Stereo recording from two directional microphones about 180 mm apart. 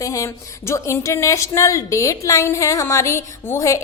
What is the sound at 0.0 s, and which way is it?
A woman's voice, 20° left (ahead or behind).